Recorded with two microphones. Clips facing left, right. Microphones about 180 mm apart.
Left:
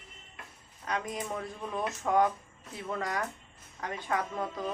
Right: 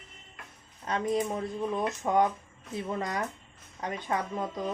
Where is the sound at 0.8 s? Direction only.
25° right (ahead or behind).